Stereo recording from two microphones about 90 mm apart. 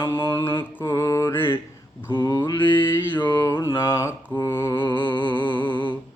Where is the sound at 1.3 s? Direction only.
25° left (ahead or behind).